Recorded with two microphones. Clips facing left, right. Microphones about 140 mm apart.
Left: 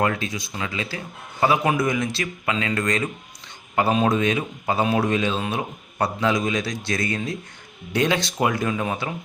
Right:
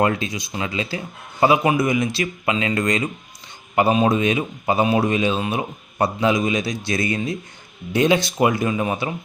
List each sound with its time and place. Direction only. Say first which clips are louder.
0.0 s a man's voice: right 3 dB; 20° right (ahead or behind)
2.2 s a man's voice: right 3 dB; 20° right (ahead or behind)